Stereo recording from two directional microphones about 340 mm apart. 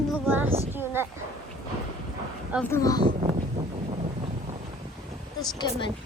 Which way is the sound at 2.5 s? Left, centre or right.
Centre.